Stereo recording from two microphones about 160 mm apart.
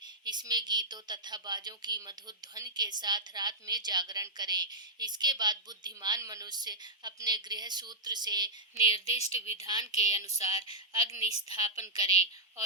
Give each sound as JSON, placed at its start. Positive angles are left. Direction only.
{"t": 0.3, "sound": "speech", "side_deg": -25}
{"t": 9.0, "sound": "speech", "side_deg": 40}
{"t": 9.6, "sound": "speech", "side_deg": -25}